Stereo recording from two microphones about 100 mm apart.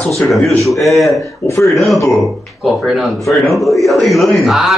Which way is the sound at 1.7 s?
Centre (ahead or behind).